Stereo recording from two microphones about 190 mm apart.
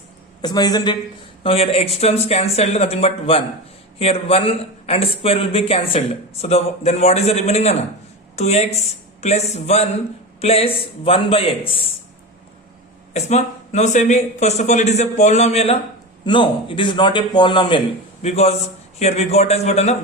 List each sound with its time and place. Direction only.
0.4 s a man's voice: 20° left (ahead or behind)
1.5 s a man's voice: 30° left (ahead or behind)
13.1 s a man's voice: 35° left (ahead or behind)